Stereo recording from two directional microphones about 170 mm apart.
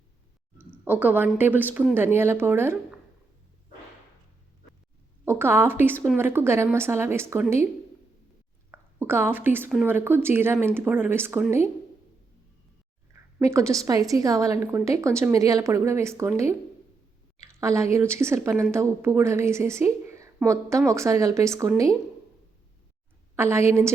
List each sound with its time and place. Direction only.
0.6 s a woman's voice: 10° right (ahead or behind)
5.2 s speech: 15° right (ahead or behind)
8.7 s speech: 15° right (ahead or behind)
13.4 s a woman's voice: 15° right (ahead or behind)
17.4 s a sound: 15° right (ahead or behind)
17.9 s speech: 15° right (ahead or behind)
23.3 s a woman's voice: 15° right (ahead or behind)